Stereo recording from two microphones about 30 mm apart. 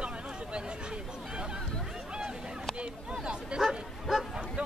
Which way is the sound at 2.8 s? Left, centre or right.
Right.